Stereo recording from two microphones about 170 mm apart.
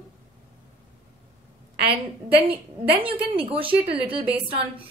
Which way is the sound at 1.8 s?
35° right (ahead or behind).